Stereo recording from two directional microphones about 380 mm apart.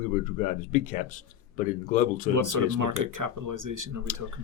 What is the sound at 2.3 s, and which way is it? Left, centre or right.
Speech, right.